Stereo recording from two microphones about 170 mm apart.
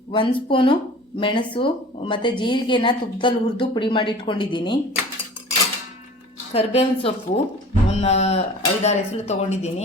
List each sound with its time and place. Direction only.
0.1 s speech: 30° left (ahead or behind)
6.5 s speech: 35° left (ahead or behind)